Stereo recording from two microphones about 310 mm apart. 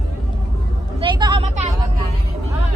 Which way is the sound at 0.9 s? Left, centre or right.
Centre.